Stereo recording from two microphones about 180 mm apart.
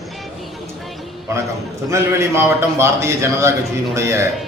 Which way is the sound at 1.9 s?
15° right (ahead or behind).